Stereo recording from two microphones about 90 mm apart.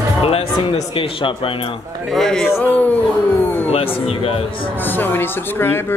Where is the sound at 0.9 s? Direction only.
75° left (ahead or behind).